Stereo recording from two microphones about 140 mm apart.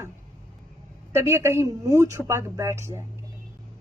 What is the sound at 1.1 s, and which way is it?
Speech, 20° right (ahead or behind).